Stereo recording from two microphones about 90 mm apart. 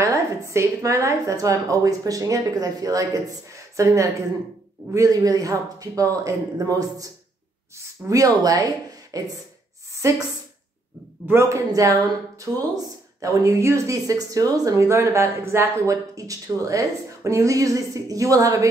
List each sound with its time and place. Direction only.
0.0 s a woman's voice: 35° right (ahead or behind)
11.2 s speech: 30° right (ahead or behind)